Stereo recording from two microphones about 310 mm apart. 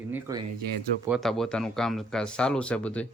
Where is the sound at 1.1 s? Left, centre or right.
Centre.